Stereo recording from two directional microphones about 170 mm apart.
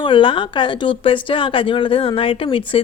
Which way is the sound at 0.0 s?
30° left (ahead or behind).